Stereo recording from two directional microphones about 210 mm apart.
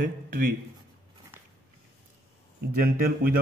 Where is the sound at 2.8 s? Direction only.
45° right (ahead or behind).